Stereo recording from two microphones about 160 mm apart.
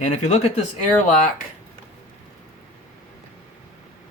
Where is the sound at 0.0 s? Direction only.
45° left (ahead or behind).